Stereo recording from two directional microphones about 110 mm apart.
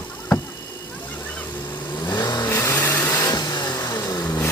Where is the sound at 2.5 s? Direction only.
25° left (ahead or behind).